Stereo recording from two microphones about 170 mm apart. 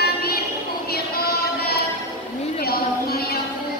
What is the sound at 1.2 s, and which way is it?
Music, 65° left (ahead or behind).